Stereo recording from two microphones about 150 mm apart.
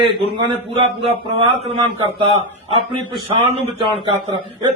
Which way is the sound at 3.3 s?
30° right (ahead or behind).